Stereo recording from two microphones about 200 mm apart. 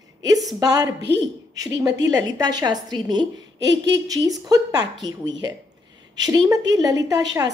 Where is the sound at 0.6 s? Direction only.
20° right (ahead or behind).